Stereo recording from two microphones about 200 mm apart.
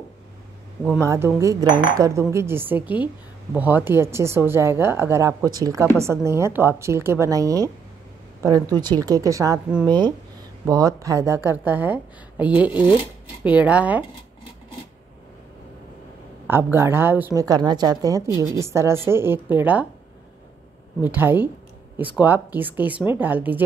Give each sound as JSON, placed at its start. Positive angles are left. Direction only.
{"t": 0.9, "sound": "a woman's voice", "side_deg": -15}
{"t": 16.4, "sound": "a woman's voice", "side_deg": -10}
{"t": 21.0, "sound": "a woman's voice", "side_deg": -10}